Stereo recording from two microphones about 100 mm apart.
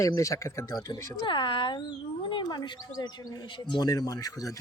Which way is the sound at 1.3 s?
55° left (ahead or behind).